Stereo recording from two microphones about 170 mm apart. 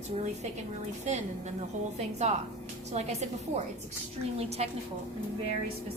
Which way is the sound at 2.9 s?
40° right (ahead or behind).